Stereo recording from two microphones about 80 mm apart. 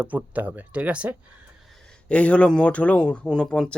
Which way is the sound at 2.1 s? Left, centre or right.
Centre.